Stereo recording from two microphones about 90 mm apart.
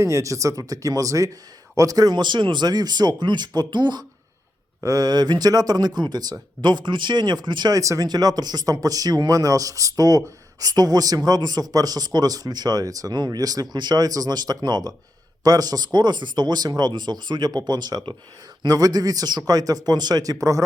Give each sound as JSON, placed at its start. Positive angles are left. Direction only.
{"t": 0.0, "sound": "speech", "side_deg": -35}
{"t": 4.8, "sound": "speech", "side_deg": -40}
{"t": 7.8, "sound": "speech", "side_deg": -35}
{"t": 8.0, "sound": "speech", "side_deg": -45}